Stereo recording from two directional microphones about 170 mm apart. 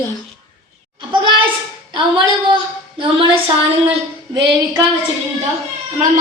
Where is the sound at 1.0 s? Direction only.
30° right (ahead or behind).